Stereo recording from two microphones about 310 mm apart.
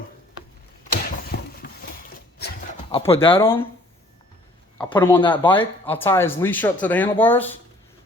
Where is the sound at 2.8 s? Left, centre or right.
Centre.